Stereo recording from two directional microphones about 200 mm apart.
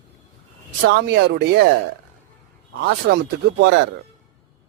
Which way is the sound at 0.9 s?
60° right (ahead or behind).